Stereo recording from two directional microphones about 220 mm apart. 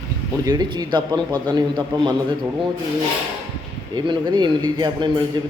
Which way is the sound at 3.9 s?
20° right (ahead or behind).